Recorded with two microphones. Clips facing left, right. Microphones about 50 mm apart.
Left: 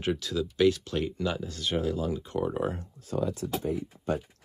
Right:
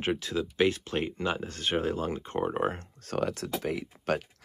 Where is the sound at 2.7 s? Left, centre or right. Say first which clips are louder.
Even; right.